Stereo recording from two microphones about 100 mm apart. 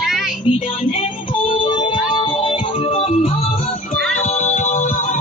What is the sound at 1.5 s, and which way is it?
Music, 55° left (ahead or behind).